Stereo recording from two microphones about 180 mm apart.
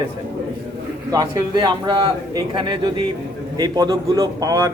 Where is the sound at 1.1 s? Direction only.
20° right (ahead or behind).